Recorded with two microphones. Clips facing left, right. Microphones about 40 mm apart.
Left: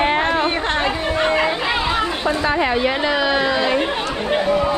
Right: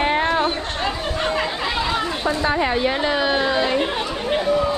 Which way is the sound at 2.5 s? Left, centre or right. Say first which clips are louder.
Left 2 dB; left.